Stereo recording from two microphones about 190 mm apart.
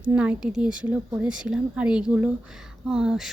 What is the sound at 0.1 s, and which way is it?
A woman's voice, 5° right (ahead or behind).